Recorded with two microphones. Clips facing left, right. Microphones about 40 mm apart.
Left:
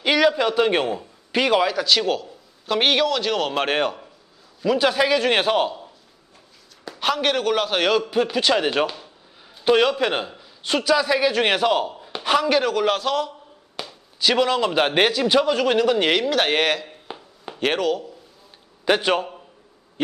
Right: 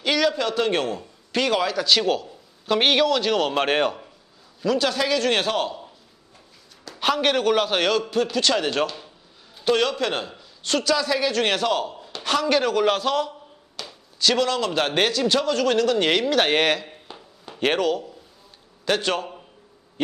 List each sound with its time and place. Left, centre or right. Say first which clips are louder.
0.0 s a man's voice: left 3 dB; centre
4.6 s a woman's voice: left 3 dB; centre
7.0 s a woman's voice: even; centre
13.8 s a sound: left 3 dB; left
14.2 s a woman's voice: left 2 dB; centre
16.1 s speech: even; centre
18.9 s a woman's voice: left 4 dB; centre